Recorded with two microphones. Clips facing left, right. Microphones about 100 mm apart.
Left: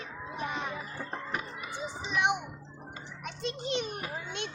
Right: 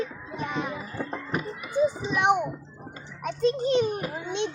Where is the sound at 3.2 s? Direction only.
40° right (ahead or behind).